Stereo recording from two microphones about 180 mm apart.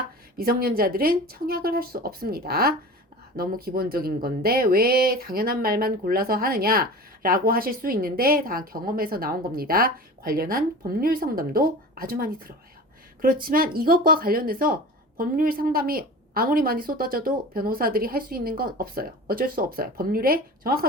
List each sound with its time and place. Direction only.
0.3 s a woman's voice: 55° right (ahead or behind)